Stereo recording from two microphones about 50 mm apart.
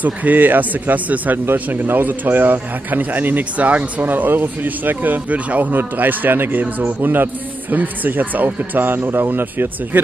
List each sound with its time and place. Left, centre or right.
0.0 s speech: right
1.4 s speech: right